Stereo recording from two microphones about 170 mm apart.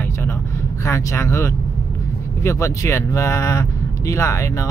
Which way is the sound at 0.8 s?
15° left (ahead or behind).